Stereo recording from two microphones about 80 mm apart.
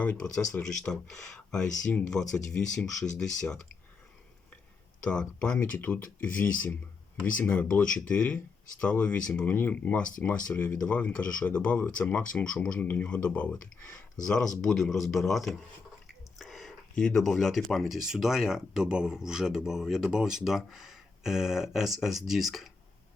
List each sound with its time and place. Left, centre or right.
0.0 s speech: centre
5.0 s speech: centre
5.5 s speech: left; by 15.5 s centre
16.4 s a sound: centre
17.0 s speech: centre